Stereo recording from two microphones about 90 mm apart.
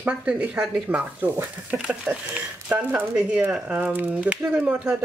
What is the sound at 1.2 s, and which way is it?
Speech, 20° right (ahead or behind).